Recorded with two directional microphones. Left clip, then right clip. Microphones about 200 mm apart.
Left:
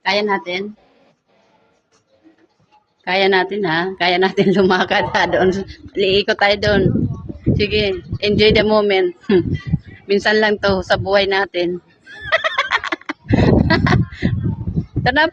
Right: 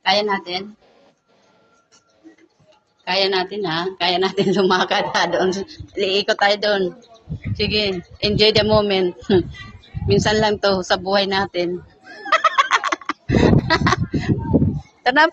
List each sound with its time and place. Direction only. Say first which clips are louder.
0.0 s speech: left 1 dB; 25° left (ahead or behind)
3.0 s a woman's voice: left 4 dB; 35° left (ahead or behind)
12.2 s neigh: right 2 dB; 35° left (ahead or behind)
15.0 s speech: even; 25° left (ahead or behind)